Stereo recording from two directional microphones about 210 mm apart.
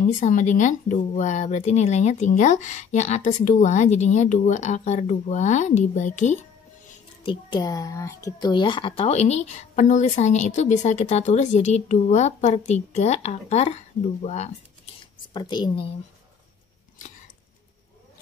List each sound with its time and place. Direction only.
0.0 s speech: 35° left (ahead or behind)
7.2 s speech: 20° left (ahead or behind)
15.0 s a sound: 20° left (ahead or behind)